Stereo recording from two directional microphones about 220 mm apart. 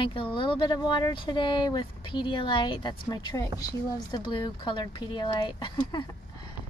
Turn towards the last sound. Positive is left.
turn(degrees=20)  # may be behind; listen again after turning